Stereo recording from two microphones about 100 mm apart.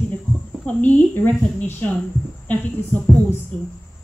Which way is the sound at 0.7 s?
15° left (ahead or behind).